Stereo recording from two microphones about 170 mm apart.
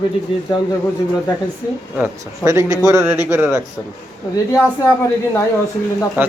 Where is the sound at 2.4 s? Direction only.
20° right (ahead or behind).